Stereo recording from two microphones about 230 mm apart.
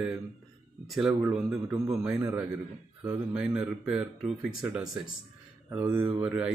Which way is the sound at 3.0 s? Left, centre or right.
Centre.